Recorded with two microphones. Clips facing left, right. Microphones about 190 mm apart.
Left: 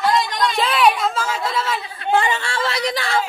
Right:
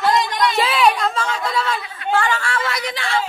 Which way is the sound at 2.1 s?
20° left (ahead or behind).